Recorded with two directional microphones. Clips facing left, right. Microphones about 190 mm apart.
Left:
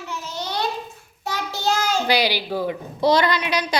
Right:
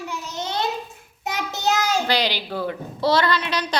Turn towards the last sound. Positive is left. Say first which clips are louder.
# left 1 dB
turn(degrees=10)  # may be behind; listen again after turning